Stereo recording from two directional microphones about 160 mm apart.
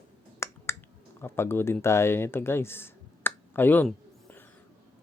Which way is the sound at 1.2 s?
15° left (ahead or behind).